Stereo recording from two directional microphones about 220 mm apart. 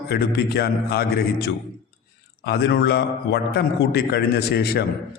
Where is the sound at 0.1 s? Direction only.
45° left (ahead or behind).